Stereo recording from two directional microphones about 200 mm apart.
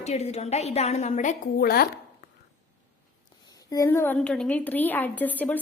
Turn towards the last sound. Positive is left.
turn(degrees=10)  # may be behind; listen again after turning